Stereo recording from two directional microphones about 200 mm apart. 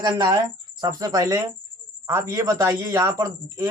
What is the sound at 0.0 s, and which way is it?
A man's voice, 20° right (ahead or behind).